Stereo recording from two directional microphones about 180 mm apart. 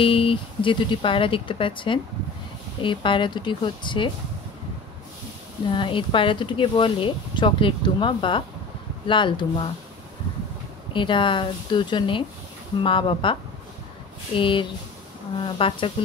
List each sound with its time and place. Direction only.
0.0 s speech: 30° left (ahead or behind)
5.7 s speech: 30° left (ahead or behind)
10.9 s speech: 25° left (ahead or behind)